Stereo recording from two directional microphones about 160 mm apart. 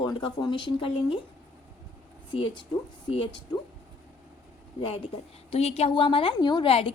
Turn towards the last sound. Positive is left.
turn(degrees=35)  # may be behind; listen again after turning